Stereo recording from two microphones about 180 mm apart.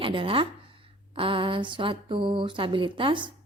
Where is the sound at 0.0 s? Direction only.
30° right (ahead or behind).